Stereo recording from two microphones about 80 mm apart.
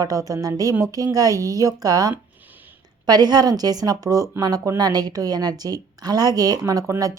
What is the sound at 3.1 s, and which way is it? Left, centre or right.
A woman's voice, right.